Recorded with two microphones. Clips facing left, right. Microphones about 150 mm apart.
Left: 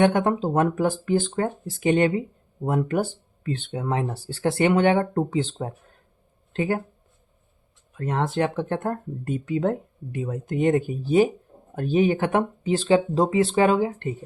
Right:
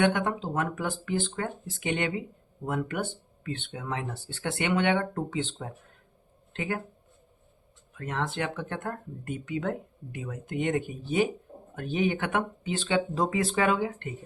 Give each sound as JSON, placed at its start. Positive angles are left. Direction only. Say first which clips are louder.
{"t": 0.0, "sound": "speech", "louder": "left 6 dB", "side_deg": 35}
{"t": 7.9, "sound": "speech", "louder": "left 7 dB", "side_deg": 35}